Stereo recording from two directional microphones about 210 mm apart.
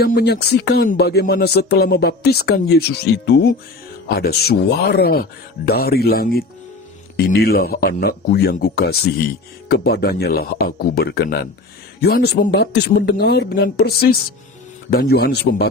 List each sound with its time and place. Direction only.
0.0 s speech: 50° left (ahead or behind)